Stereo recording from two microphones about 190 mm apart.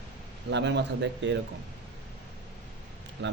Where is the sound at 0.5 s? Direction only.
70° right (ahead or behind).